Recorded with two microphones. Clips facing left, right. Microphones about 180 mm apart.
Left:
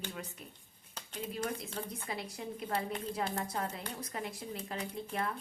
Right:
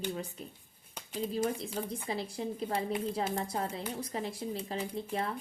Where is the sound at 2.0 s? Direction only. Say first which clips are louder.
Right 5 dB; 30° right (ahead or behind).